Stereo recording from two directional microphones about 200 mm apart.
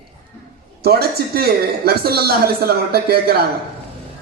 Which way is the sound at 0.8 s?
50° right (ahead or behind).